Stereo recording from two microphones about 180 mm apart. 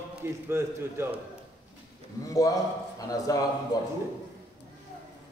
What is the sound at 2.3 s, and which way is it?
A man's voice, 20° left (ahead or behind).